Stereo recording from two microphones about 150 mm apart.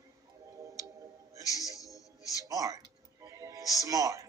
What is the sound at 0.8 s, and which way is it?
Music, 20° right (ahead or behind).